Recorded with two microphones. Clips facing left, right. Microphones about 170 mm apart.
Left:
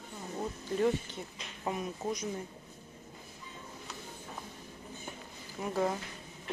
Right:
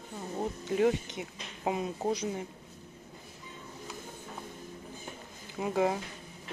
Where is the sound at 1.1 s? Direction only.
20° right (ahead or behind).